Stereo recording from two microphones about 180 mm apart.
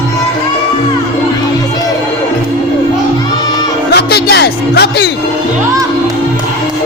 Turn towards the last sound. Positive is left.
turn(degrees=65)  # may be behind; listen again after turning